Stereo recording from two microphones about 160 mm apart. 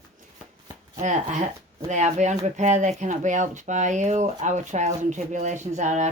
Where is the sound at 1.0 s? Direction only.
50° right (ahead or behind).